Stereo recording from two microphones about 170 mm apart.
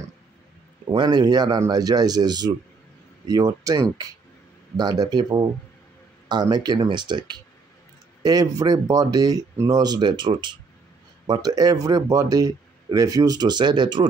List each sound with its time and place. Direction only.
0.9 s speech: 25° right (ahead or behind)